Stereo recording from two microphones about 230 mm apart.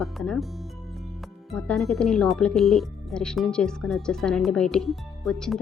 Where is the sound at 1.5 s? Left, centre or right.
Centre.